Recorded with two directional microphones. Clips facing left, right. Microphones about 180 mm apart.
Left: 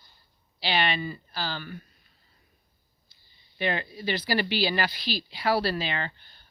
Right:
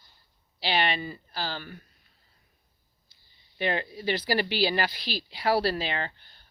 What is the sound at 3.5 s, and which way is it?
Speech, 40° right (ahead or behind).